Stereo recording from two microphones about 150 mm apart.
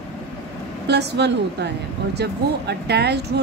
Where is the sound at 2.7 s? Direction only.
90° right.